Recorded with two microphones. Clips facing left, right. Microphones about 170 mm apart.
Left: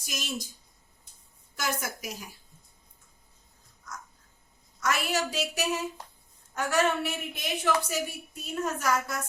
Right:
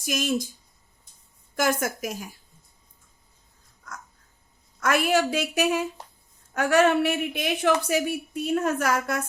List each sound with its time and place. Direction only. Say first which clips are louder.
0.0 s a woman's voice: right 11 dB; 55° right (ahead or behind)
1.5 s a woman's voice: right 8 dB; 50° right (ahead or behind)
4.8 s a woman's voice: right 7 dB; 55° right (ahead or behind)